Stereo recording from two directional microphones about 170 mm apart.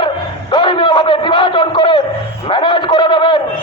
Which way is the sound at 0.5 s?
25° left (ahead or behind).